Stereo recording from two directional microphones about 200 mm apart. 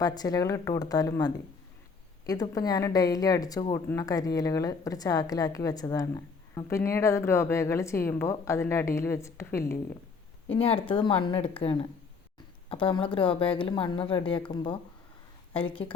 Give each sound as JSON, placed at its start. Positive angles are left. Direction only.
{"t": 0.0, "sound": "a woman's voice", "side_deg": 20}
{"t": 10.5, "sound": "speech", "side_deg": 30}
{"t": 12.8, "sound": "speech", "side_deg": 25}